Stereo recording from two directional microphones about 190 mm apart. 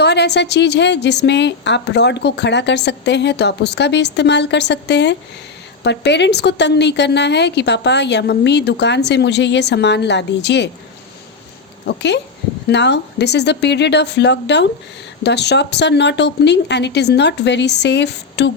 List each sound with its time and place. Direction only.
0.0 s a woman's voice: 60° left (ahead or behind)
12.6 s a woman's voice: 65° left (ahead or behind)